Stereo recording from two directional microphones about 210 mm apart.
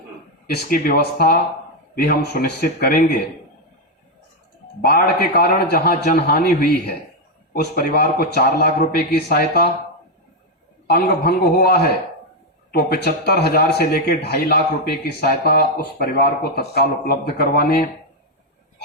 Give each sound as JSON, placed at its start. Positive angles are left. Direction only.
{"t": 0.4, "sound": "speech", "side_deg": 45}
{"t": 4.8, "sound": "speech", "side_deg": 45}
{"t": 10.8, "sound": "speech", "side_deg": 45}